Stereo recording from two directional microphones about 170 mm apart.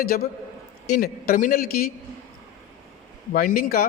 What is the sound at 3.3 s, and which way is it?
Speech, 60° left (ahead or behind).